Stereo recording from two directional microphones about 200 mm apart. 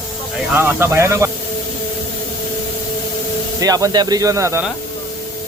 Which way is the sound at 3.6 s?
15° right (ahead or behind).